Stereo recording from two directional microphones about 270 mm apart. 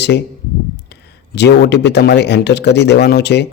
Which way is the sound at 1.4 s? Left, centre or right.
Left.